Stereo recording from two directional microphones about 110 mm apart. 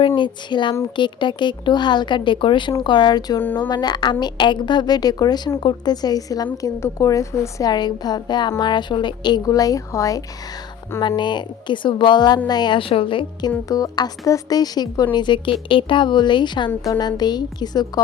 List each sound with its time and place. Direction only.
0.2 s a woman's voice: 45° left (ahead or behind)
3.4 s speech: 20° left (ahead or behind)
3.7 s a woman's voice: 40° left (ahead or behind)
11.2 s speech: 45° left (ahead or behind)
13.7 s a woman's voice: 35° left (ahead or behind)